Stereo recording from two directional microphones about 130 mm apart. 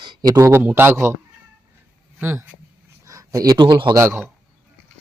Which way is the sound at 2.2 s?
15° right (ahead or behind).